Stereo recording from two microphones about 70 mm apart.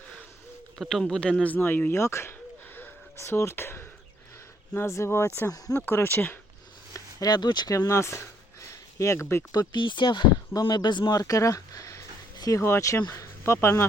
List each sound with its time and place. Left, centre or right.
0.8 s a man's voice: centre
1.5 s speech: left
2.0 s speech: left
4.9 s speech: left
5.5 s speech: left
5.9 s speech: left
6.9 s speech: left
7.7 s speech: left
8.6 s a sound: left
9.5 s speech: left
11.2 s a sound: left
12.9 s speech: left
13.4 s speech: left